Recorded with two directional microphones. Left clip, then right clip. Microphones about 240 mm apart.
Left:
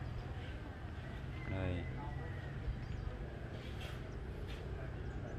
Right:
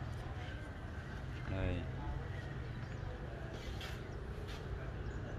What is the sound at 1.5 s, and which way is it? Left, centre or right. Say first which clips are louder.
Speech: right 1 dB; centre.